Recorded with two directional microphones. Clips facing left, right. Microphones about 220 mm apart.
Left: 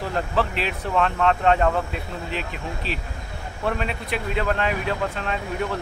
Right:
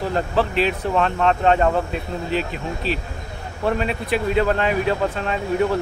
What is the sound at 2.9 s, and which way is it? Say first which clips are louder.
Speech: right 7 dB; centre (ahead or behind).